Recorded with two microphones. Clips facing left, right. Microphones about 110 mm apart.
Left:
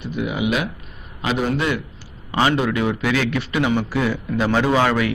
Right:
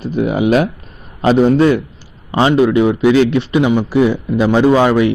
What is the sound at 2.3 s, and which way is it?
A man's voice, 20° right (ahead or behind).